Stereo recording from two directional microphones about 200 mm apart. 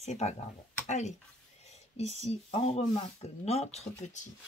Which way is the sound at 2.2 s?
30° left (ahead or behind).